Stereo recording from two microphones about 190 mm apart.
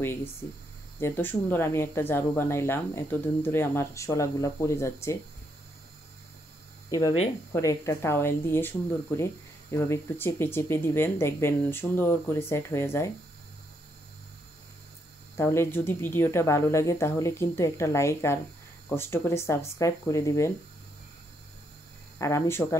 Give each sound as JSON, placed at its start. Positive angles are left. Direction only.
{"t": 0.0, "sound": "speech", "side_deg": 10}
{"t": 6.9, "sound": "speech", "side_deg": 20}
{"t": 15.3, "sound": "speech", "side_deg": 15}
{"t": 22.2, "sound": "speech", "side_deg": 15}